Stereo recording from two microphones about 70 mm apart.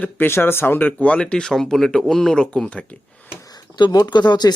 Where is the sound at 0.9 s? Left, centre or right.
Centre.